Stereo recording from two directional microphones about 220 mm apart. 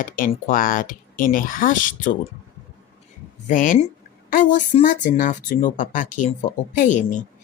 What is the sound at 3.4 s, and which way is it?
Speech, 35° left (ahead or behind).